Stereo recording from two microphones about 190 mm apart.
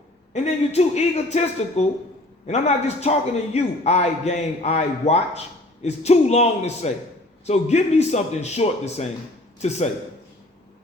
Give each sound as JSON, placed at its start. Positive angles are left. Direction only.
{"t": 0.3, "sound": "a man's voice", "side_deg": 35}